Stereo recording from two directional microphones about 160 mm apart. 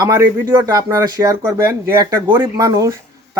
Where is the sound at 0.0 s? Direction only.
15° right (ahead or behind).